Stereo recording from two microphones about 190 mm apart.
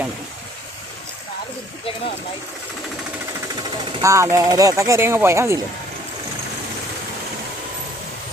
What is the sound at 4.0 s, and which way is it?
Speech, 15° right (ahead or behind).